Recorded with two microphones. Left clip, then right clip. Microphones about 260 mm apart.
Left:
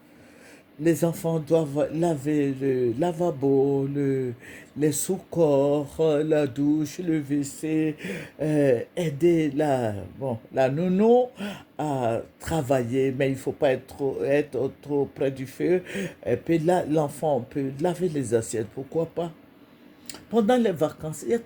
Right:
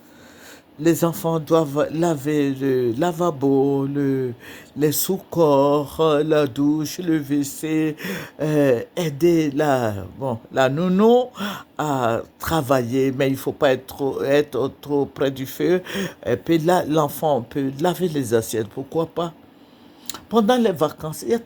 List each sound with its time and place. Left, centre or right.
0.8 s speech: right
20.1 s speech: centre